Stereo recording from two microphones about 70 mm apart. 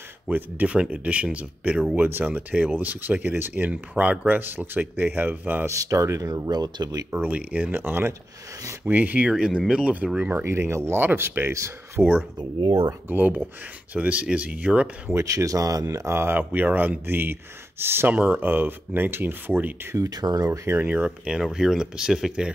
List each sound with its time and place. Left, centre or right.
0.3 s speech: right
2.0 s speech: right
5.7 s speech: right
6.3 s speech: right
7.1 s speech: right
9.3 s speech: centre
10.4 s speech: right
12.0 s speech: centre
15.1 s speech: right
20.0 s speech: right
20.4 s speech: right
20.7 s speech: right
21.4 s speech: centre